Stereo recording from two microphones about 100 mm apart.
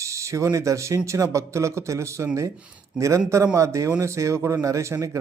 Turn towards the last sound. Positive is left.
turn(degrees=-30)  # may be behind; listen again after turning